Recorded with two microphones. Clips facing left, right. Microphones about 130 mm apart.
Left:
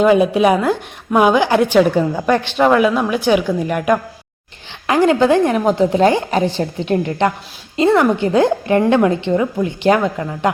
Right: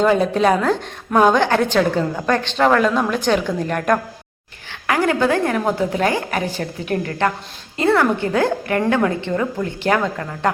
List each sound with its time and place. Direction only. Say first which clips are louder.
0.0 s a woman's voice: left 4 dB; 10° left (ahead or behind)
4.9 s a woman's voice: left 5 dB; 20° left (ahead or behind)